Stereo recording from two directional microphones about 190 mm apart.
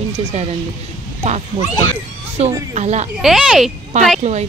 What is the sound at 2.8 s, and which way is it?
Speech, 35° right (ahead or behind).